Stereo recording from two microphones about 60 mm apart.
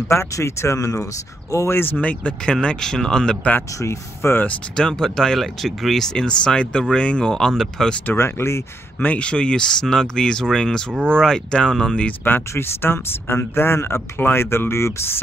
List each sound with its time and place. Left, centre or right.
0.1 s speech: left
1.7 s speech: left
2.0 s speech: left
3.8 s speech: left
4.7 s speech: centre
8.1 s speech: left
9.0 s speech: left
12.3 s speech: left